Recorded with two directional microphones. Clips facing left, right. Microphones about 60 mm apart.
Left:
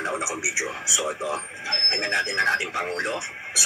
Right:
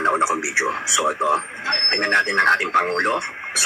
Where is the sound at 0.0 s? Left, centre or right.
Right.